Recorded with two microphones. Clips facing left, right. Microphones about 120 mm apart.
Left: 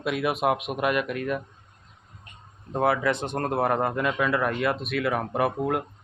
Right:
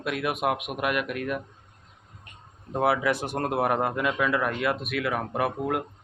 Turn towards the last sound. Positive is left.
turn(degrees=0)  # may be behind; listen again after turning